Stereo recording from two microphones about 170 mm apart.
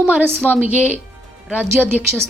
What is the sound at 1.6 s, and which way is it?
Speech, 15° right (ahead or behind).